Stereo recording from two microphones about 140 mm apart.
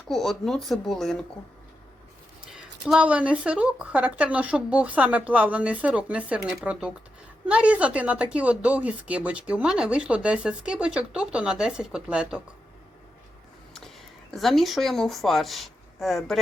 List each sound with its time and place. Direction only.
0.1 s speech: centre (ahead or behind)
2.8 s speech: 5° right (ahead or behind)
13.7 s speech: 5° left (ahead or behind)